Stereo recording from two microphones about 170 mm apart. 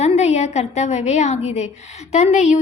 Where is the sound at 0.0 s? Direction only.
40° left (ahead or behind).